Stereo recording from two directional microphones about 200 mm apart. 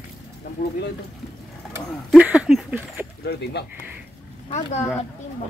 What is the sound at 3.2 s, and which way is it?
Speech, 55° left (ahead or behind).